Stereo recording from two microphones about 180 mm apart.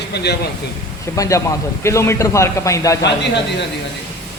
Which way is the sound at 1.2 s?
15° left (ahead or behind).